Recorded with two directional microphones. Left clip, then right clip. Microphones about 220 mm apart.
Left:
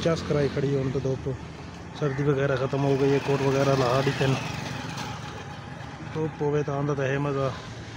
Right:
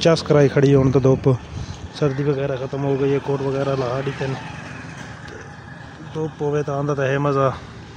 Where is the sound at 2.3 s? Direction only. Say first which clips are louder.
Right 2 dB; centre (ahead or behind).